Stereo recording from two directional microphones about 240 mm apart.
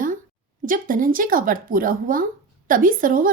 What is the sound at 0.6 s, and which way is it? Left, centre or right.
A woman's voice, right.